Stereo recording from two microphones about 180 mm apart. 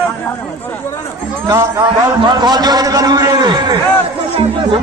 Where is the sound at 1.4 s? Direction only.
15° right (ahead or behind).